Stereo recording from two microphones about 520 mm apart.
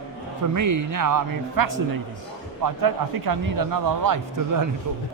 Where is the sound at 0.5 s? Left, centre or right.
Right.